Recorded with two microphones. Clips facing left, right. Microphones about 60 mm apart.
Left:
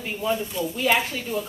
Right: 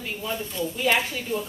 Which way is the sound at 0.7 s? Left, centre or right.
Centre.